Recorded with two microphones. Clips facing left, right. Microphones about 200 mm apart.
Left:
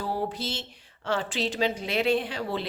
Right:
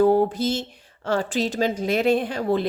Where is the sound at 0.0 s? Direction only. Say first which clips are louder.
Right 12 dB; 50° right (ahead or behind).